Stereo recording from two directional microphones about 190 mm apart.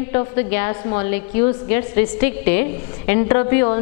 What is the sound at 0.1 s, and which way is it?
A woman's voice, 15° left (ahead or behind).